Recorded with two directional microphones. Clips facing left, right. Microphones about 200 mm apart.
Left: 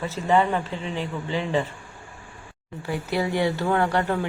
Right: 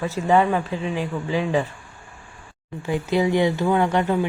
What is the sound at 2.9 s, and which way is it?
A woman's voice, 20° right (ahead or behind).